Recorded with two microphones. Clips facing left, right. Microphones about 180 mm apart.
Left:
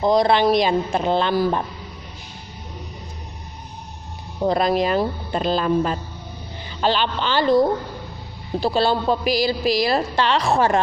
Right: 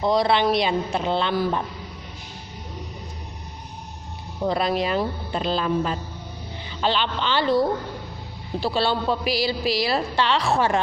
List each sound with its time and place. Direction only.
0.0 s a woman's voice: 45° left (ahead or behind)
4.4 s a woman's voice: 45° left (ahead or behind)